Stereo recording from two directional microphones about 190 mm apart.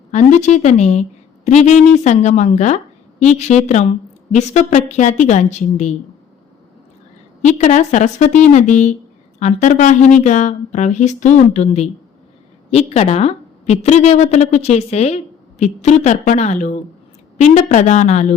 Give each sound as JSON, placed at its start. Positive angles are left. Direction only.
{"t": 0.1, "sound": "a woman's voice", "side_deg": 40}
{"t": 7.4, "sound": "a woman's voice", "side_deg": 40}